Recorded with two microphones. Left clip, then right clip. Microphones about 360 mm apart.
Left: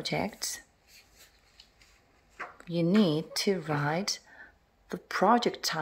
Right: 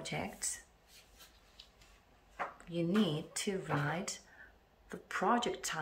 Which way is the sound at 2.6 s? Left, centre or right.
Centre.